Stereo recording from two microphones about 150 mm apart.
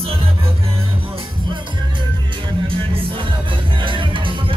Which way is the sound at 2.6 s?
35° right (ahead or behind).